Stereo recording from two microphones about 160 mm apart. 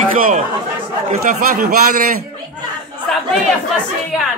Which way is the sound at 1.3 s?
65° right (ahead or behind).